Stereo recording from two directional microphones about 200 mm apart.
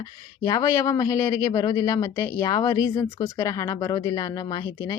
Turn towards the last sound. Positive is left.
turn(degrees=20)  # may be behind; listen again after turning